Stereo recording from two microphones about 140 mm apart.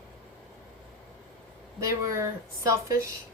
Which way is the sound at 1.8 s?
25° right (ahead or behind).